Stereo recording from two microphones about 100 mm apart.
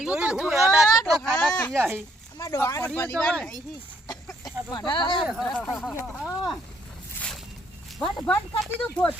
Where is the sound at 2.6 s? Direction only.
25° left (ahead or behind).